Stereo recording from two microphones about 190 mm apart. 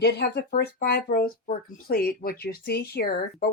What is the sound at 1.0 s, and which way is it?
Speech, 50° left (ahead or behind).